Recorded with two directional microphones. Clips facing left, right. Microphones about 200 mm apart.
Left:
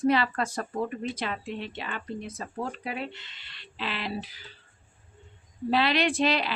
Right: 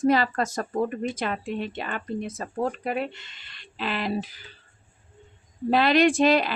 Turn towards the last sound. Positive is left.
turn(degrees=-45)  # may be behind; listen again after turning